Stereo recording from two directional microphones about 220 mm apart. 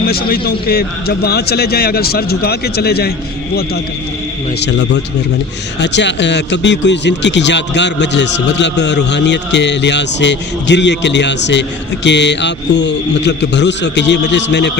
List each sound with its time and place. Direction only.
0.1 s speech: 45° left (ahead or behind)
4.6 s speech: 55° left (ahead or behind)